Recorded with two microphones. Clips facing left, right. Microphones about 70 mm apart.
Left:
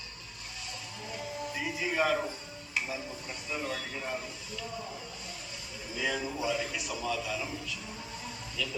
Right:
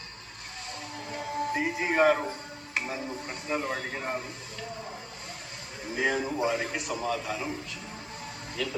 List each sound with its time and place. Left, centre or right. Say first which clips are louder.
1.1 s music: right 7 dB; right
2.7 s a man's voice: right 3 dB; right
5.9 s a man's voice: right 5 dB; right